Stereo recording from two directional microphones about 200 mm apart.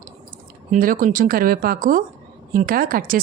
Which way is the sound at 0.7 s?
45° right (ahead or behind).